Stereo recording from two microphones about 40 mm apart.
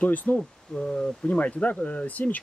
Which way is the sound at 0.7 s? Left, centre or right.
Centre.